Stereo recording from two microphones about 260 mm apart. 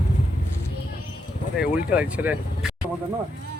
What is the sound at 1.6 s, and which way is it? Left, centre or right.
Speech, centre.